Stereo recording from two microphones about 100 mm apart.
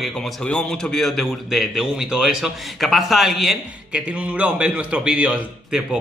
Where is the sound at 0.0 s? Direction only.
10° left (ahead or behind).